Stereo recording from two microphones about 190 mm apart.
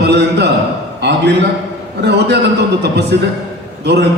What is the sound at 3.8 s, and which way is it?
Speech, 60° right (ahead or behind).